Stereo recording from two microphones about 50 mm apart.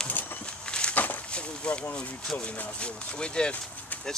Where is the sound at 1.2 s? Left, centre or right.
Left.